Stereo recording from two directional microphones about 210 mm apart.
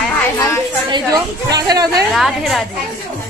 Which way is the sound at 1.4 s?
20° right (ahead or behind).